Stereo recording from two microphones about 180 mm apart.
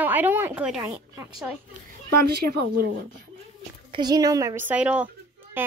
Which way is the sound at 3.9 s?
25° right (ahead or behind).